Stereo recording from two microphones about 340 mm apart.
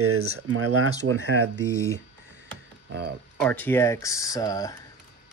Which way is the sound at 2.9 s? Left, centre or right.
Right.